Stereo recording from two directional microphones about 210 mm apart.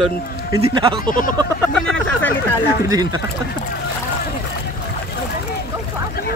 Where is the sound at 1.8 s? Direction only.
5° left (ahead or behind).